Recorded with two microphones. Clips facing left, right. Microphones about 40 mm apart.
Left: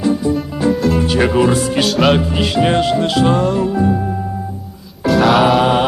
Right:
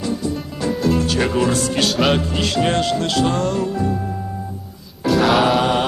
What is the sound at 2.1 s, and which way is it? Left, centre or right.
Music, centre.